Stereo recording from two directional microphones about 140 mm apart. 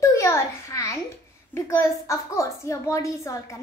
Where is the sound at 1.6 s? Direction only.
20° left (ahead or behind).